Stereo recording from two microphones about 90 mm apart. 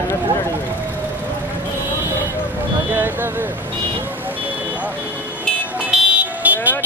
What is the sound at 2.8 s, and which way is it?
Vehicle, 20° right (ahead or behind).